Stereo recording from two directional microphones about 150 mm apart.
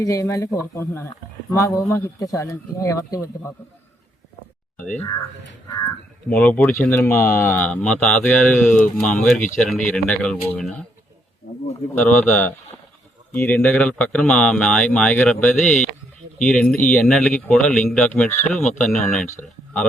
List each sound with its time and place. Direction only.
0.0 s speech: 20° left (ahead or behind)
4.8 s speech: 10° left (ahead or behind)
5.6 s speech: 25° left (ahead or behind)
6.2 s speech: 10° left (ahead or behind)
11.9 s speech: 10° left (ahead or behind)